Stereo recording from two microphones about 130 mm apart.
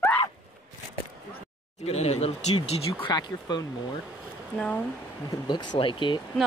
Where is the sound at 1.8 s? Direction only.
55° left (ahead or behind).